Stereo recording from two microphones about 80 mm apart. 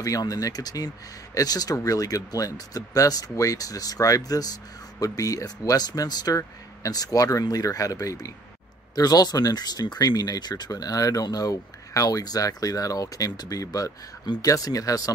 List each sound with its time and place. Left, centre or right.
0.0 s speech: left